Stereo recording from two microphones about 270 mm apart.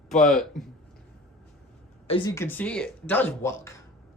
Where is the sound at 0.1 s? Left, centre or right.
Centre.